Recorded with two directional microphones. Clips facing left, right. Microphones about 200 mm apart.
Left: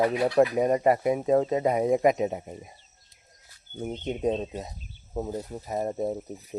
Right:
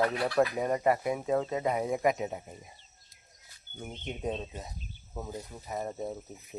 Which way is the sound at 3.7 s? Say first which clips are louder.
Left 9 dB; 35° left (ahead or behind).